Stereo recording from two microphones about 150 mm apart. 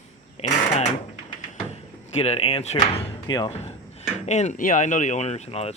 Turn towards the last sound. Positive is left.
turn(degrees=45)  # may be behind; listen again after turning